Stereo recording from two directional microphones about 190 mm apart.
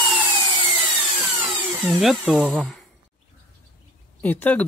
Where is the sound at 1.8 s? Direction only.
Centre (ahead or behind).